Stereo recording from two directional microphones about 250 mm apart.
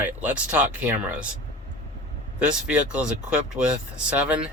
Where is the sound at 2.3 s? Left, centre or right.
Centre.